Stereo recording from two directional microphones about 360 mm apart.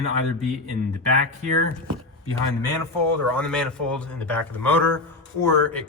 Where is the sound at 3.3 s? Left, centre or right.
Centre.